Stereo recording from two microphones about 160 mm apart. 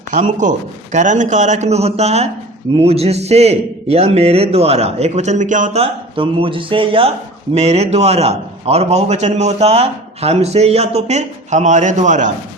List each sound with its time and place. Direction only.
0.1 s a man's voice: 50° right (ahead or behind)
5.8 s a man's voice: 35° right (ahead or behind); by 12.3 s 50° right (ahead or behind)